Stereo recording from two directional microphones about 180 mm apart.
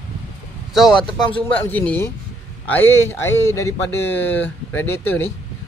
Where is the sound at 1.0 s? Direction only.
25° left (ahead or behind).